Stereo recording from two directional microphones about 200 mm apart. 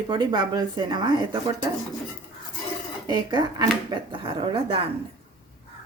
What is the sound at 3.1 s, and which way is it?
Speech, 20° right (ahead or behind).